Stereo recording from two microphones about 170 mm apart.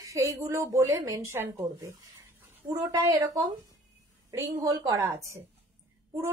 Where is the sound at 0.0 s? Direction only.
20° right (ahead or behind).